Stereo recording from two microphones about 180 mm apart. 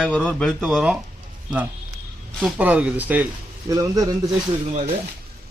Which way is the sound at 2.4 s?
5° right (ahead or behind).